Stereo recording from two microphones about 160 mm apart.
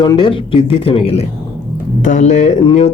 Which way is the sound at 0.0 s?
30° left (ahead or behind).